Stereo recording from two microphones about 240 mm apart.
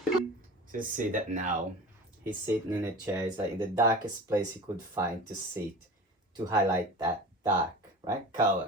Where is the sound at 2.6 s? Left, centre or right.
Centre.